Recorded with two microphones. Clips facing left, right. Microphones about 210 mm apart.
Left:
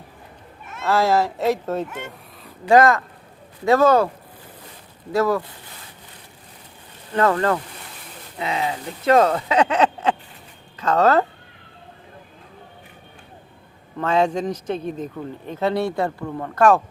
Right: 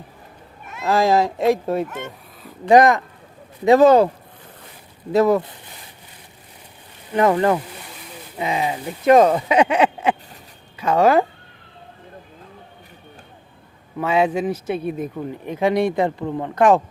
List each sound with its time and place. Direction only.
0.9 s speech: 15° right (ahead or behind)
1.9 s speech: 10° left (ahead or behind)
2.6 s speech: 20° right (ahead or behind)
5.1 s speech: 20° right (ahead or behind)
7.1 s speech: 15° right (ahead or behind)
14.0 s speech: 10° right (ahead or behind)